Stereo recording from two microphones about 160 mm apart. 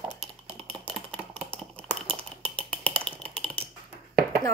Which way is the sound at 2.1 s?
10° left (ahead or behind).